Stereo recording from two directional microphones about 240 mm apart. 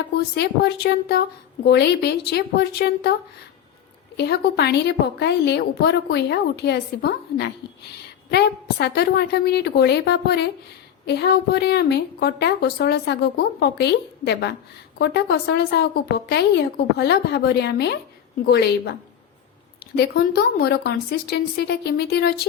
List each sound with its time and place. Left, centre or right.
0.2 s a woman's voice: left
4.2 s a woman's voice: left
20.0 s a woman's voice: left